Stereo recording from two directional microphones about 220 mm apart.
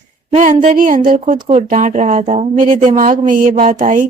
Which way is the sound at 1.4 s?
25° right (ahead or behind).